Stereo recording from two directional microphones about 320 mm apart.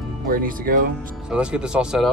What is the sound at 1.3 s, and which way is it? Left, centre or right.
Speech, centre.